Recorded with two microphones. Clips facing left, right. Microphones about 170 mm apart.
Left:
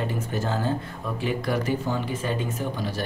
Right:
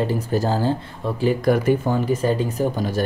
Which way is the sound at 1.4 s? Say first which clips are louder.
Right 8 dB; 50° right (ahead or behind).